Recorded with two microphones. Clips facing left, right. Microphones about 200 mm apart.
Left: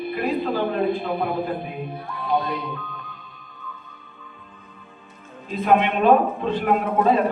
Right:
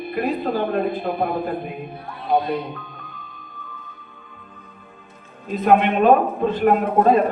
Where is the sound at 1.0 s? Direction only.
50° right (ahead or behind).